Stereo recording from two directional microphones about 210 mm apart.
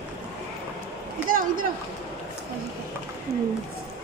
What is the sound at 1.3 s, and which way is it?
Speech, 40° right (ahead or behind).